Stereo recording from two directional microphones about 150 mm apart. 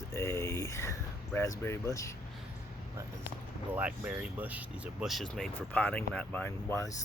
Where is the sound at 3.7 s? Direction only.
10° right (ahead or behind); by 6.9 s 15° left (ahead or behind).